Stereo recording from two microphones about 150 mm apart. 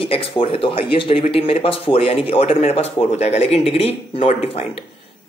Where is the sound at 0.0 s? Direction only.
35° left (ahead or behind).